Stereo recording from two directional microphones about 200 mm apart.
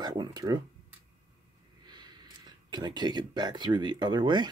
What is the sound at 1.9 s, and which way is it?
Speech, 20° right (ahead or behind).